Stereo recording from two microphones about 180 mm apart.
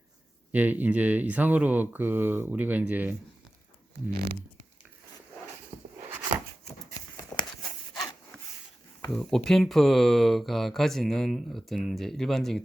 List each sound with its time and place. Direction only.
0.5 s speech: 10° right (ahead or behind)
7.2 s a sound: 20° left (ahead or behind)
9.0 s speech: 5° left (ahead or behind)